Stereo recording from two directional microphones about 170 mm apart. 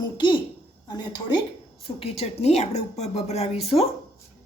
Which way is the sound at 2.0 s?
35° left (ahead or behind).